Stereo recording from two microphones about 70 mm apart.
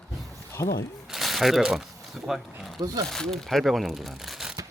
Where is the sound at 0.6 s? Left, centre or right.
Left.